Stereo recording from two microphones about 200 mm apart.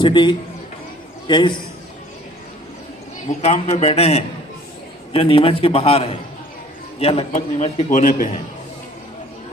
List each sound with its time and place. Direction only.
0.0 s a man's voice: 25° left (ahead or behind)
3.2 s a man's voice: 35° left (ahead or behind)